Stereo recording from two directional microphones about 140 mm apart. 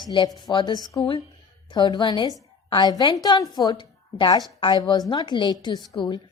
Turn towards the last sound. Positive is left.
turn(degrees=35)  # may be behind; listen again after turning